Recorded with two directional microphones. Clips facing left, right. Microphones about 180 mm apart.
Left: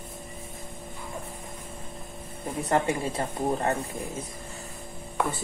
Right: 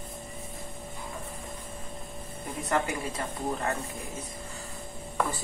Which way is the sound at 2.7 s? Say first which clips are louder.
Left 4 dB; 30° left (ahead or behind).